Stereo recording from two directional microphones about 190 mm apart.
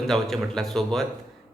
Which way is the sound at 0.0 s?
Centre (ahead or behind).